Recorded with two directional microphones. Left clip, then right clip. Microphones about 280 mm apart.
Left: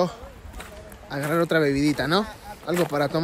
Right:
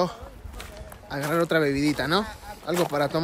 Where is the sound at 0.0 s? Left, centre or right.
Centre.